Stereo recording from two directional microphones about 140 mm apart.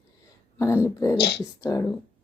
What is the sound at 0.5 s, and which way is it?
Speech, 20° left (ahead or behind).